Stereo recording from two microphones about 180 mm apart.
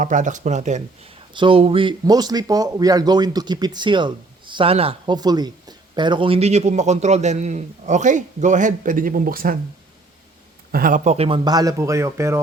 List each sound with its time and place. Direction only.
0.0 s speech: 45° right (ahead or behind)
1.3 s speech: 30° right (ahead or behind); by 9.6 s 55° right (ahead or behind)
10.7 s a man's voice: 50° right (ahead or behind); by 11.3 s 35° right (ahead or behind)
11.4 s speech: 20° right (ahead or behind)